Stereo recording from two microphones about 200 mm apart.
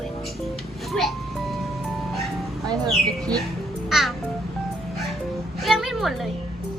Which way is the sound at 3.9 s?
Centre (ahead or behind).